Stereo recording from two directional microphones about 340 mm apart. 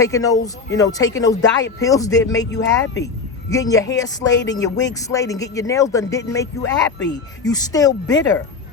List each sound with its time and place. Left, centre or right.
0.0 s speech: centre
2.6 s speech: left
3.5 s speech: centre
4.3 s speech: left
4.6 s speech: centre